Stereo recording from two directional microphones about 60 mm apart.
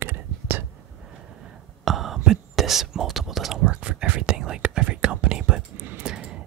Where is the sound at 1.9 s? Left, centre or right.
Centre.